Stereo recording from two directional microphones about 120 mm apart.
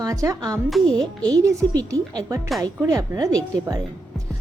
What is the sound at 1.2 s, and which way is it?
A woman's voice, 30° right (ahead or behind).